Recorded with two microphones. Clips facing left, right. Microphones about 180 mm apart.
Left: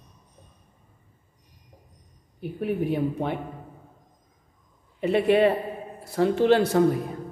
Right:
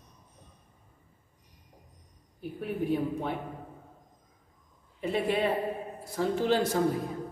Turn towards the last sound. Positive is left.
turn(degrees=65)  # may be behind; listen again after turning